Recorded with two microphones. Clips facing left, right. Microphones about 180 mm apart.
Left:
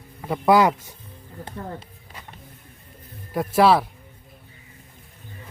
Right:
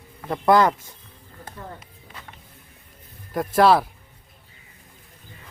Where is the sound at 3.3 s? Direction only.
5° left (ahead or behind).